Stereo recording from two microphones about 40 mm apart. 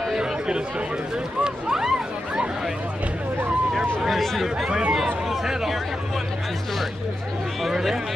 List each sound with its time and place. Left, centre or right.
0.2 s chatter: right
1.4 s speech: centre
4.1 s speech: centre
4.6 s speech: centre
5.3 s speech: centre
7.6 s speech: centre